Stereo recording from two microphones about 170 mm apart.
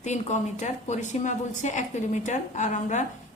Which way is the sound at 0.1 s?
45° left (ahead or behind).